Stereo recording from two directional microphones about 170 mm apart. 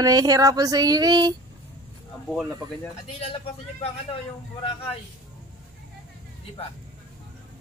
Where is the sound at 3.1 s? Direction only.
35° left (ahead or behind).